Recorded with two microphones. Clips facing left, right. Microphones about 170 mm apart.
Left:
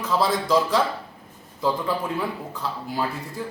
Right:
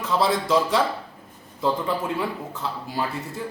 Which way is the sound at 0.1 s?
Centre (ahead or behind).